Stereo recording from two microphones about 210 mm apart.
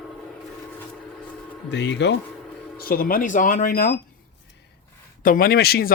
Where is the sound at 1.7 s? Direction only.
55° left (ahead or behind).